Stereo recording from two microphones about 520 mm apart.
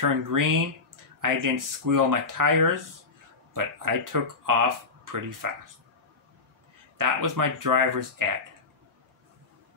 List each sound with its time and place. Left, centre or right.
0.0 s speech: right
7.0 s speech: right